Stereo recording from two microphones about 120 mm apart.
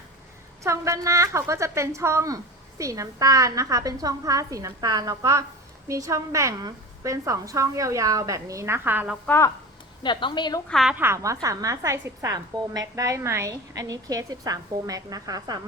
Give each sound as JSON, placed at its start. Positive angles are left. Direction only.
{"t": 0.6, "sound": "a woman's voice", "side_deg": -25}
{"t": 9.2, "sound": "speech", "side_deg": 20}
{"t": 10.0, "sound": "a woman's voice", "side_deg": 40}
{"t": 10.7, "sound": "a woman's voice", "side_deg": 0}
{"t": 10.9, "sound": "a woman's voice", "side_deg": -20}